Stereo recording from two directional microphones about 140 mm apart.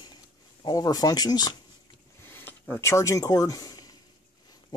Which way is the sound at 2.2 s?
15° left (ahead or behind).